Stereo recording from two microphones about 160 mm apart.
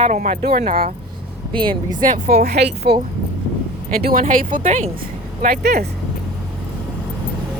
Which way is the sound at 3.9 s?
65° right (ahead or behind).